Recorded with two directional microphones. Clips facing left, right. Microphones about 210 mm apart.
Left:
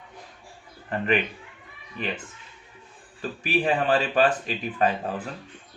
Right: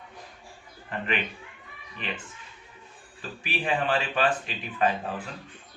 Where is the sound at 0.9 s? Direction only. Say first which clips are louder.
Left 5 dB; 40° left (ahead or behind).